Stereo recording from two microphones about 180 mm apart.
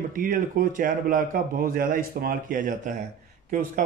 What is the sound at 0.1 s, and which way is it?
Speech, 50° right (ahead or behind).